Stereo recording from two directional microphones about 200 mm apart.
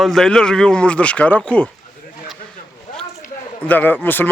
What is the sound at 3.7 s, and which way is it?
Speech, 10° left (ahead or behind).